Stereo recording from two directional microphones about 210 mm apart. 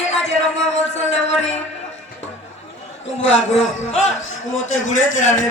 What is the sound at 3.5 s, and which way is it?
A man's voice, 30° left (ahead or behind).